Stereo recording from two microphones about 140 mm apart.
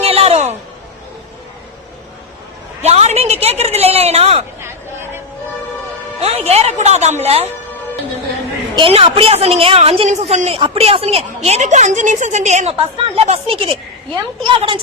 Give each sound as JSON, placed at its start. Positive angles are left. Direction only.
{"t": 0.0, "sound": "a sound", "side_deg": -45}
{"t": 2.8, "sound": "a sound", "side_deg": -50}
{"t": 4.6, "sound": "chatter", "side_deg": -15}
{"t": 6.1, "sound": "music", "side_deg": -45}
{"t": 8.7, "sound": "a woman's voice", "side_deg": -40}
{"t": 10.1, "sound": "a woman's voice", "side_deg": -55}
{"t": 10.6, "sound": "a woman's voice", "side_deg": -40}
{"t": 13.1, "sound": "a woman's voice", "side_deg": -45}